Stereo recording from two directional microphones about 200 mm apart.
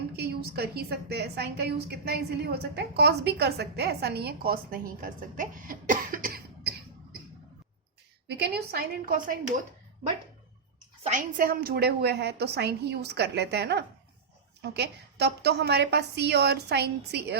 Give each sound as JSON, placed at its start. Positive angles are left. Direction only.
{"t": 0.2, "sound": "a woman's voice", "side_deg": -55}
{"t": 8.3, "sound": "a woman's voice", "side_deg": -55}
{"t": 11.0, "sound": "a woman's voice", "side_deg": -40}